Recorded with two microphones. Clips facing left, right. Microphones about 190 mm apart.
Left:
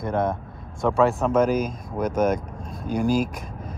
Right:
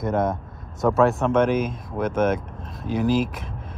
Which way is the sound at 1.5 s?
40° left (ahead or behind).